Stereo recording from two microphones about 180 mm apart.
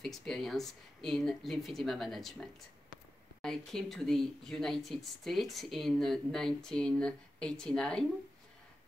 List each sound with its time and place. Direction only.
0.0 s speech: centre (ahead or behind)
3.4 s speech: 5° left (ahead or behind)